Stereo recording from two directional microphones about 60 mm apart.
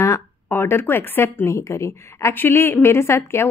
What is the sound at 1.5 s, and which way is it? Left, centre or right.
Speech, left.